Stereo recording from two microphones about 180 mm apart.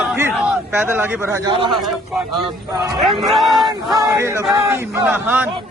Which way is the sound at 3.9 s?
15° right (ahead or behind).